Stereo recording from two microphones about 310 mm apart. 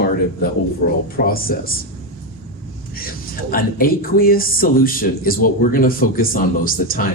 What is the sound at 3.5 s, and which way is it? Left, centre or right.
Speech, left.